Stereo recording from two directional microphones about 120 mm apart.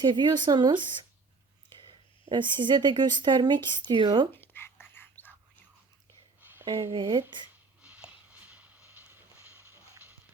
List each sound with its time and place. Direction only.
0.0 s speech: 40° right (ahead or behind)
1.8 s speech: 40° right (ahead or behind)
4.4 s whispering: 20° left (ahead or behind)
6.7 s speech: 45° right (ahead or behind)
7.8 s a sound: 10° right (ahead or behind)